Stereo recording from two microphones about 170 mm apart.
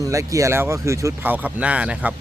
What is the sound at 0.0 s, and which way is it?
Speech, 20° right (ahead or behind).